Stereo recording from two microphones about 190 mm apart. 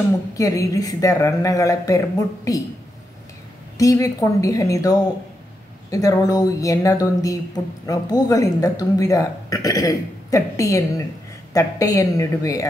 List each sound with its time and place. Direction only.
0.3 s a woman's voice: 20° left (ahead or behind)
3.7 s a woman's voice: 15° left (ahead or behind)